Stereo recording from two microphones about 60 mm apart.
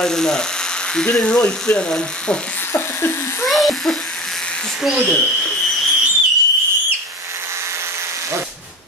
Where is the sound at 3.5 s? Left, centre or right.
Centre.